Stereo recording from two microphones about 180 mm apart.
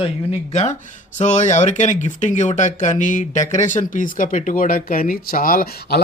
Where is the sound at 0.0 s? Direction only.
35° left (ahead or behind).